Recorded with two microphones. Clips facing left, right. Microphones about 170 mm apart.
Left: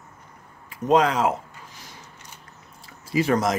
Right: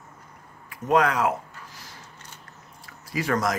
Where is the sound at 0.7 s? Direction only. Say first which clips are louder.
Left 2 dB; 25° left (ahead or behind).